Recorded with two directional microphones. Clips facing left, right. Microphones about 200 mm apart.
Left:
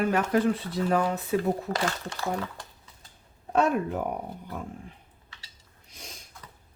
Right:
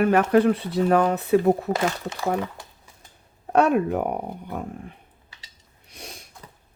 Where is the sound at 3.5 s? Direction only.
65° right (ahead or behind).